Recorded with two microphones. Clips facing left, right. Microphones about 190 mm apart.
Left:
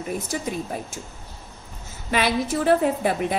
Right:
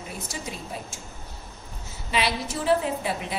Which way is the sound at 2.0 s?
50° left (ahead or behind).